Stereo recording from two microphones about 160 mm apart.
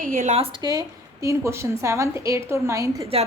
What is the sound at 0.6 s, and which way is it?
A woman's voice, 20° right (ahead or behind).